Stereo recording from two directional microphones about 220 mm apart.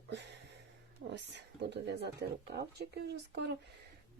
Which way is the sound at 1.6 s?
50° right (ahead or behind).